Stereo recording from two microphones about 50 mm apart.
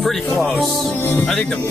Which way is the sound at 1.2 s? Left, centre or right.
Centre.